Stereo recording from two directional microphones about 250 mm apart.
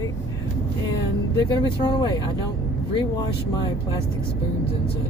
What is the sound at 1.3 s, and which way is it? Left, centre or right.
Speech, centre.